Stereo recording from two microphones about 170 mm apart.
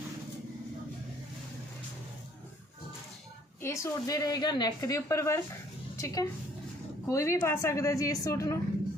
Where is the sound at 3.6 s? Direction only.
20° left (ahead or behind).